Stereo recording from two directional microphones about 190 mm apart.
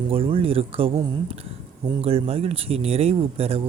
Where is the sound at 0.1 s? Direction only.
30° right (ahead or behind).